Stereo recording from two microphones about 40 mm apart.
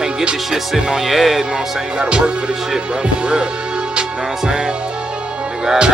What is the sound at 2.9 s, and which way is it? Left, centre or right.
Speech, right.